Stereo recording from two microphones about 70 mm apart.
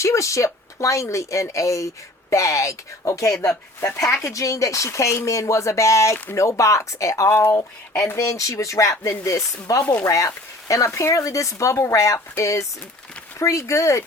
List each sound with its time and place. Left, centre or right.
0.0 s speech: left
9.8 s speech: left
10.1 s speech: left